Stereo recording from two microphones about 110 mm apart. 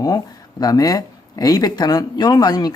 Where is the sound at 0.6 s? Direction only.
35° left (ahead or behind).